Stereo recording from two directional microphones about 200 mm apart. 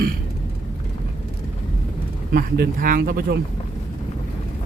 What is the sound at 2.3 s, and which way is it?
Speech, 45° right (ahead or behind).